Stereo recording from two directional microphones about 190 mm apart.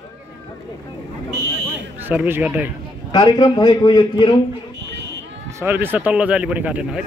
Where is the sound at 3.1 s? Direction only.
20° left (ahead or behind).